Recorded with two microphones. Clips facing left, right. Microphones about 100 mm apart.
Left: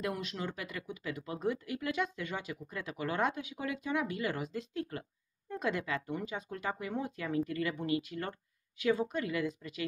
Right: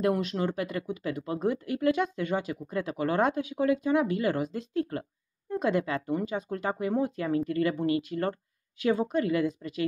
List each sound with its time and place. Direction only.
0.0 s speech: 40° right (ahead or behind)